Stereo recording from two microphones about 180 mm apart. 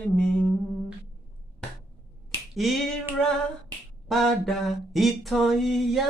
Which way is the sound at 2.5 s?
Centre (ahead or behind).